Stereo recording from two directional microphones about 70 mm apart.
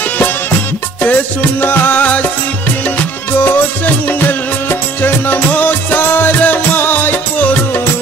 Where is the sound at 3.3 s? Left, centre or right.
Left.